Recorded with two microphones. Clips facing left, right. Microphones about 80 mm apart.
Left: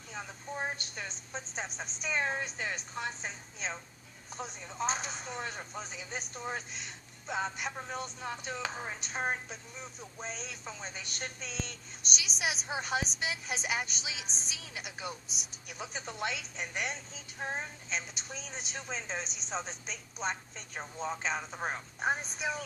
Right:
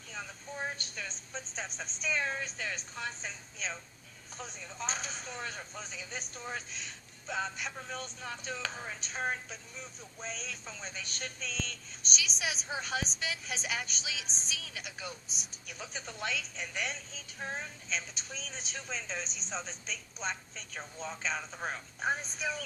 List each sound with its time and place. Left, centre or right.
0.1 s a woman's voice: left
2.1 s a woman's voice: left
4.4 s a woman's voice: left
4.7 s a woman's voice: centre
10.2 s a woman's voice: centre
17.9 s a woman's voice: centre